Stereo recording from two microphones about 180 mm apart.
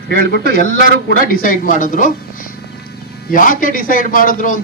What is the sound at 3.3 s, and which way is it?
A man's voice, 50° left (ahead or behind).